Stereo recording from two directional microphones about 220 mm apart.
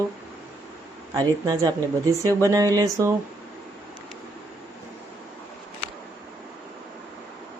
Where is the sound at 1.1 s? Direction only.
15° right (ahead or behind).